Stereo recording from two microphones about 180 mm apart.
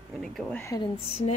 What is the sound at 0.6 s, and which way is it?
Speech, 20° left (ahead or behind).